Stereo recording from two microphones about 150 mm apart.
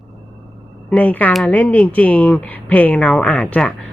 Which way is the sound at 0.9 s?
10° left (ahead or behind).